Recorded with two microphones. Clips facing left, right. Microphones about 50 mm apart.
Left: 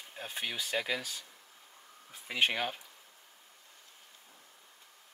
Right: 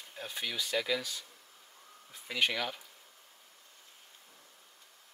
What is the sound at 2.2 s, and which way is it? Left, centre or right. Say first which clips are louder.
Speech: left 1 dB; left.